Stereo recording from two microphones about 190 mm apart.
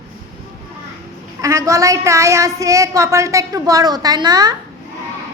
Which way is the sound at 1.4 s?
15° right (ahead or behind).